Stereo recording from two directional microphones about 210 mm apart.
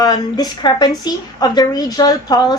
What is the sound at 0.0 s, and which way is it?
A woman's voice, 20° left (ahead or behind).